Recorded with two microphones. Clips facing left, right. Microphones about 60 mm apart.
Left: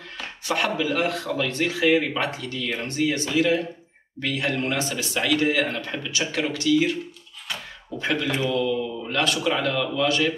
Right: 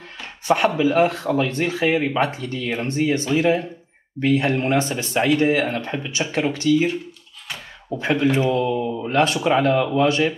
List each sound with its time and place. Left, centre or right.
0.5 s speech: right
8.0 s speech: right